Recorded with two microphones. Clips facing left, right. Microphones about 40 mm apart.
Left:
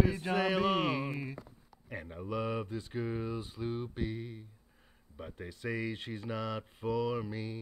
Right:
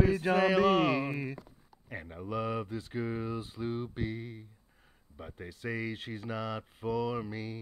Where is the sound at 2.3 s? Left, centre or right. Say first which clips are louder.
Right 1 dB; right.